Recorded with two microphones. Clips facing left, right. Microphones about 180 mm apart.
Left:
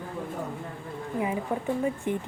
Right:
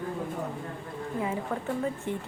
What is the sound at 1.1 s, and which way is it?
Speech, 15° left (ahead or behind).